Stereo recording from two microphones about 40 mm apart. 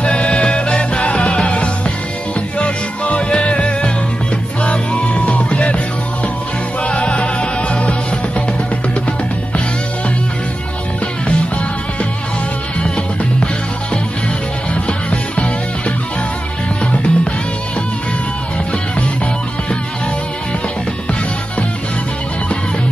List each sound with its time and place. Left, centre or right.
0.0 s music: left
6.8 s music: left
11.2 s music: left
14.7 s music: left
16.8 s music: left